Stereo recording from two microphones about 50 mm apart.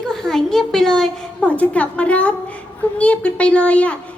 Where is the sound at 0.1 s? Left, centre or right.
Centre.